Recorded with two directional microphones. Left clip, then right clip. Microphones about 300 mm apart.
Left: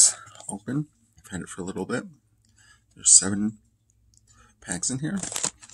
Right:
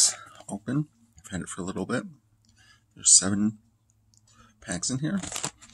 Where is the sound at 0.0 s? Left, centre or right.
Centre.